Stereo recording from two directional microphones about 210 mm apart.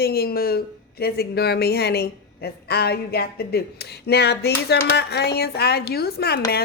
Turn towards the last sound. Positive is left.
turn(degrees=50)  # may be behind; listen again after turning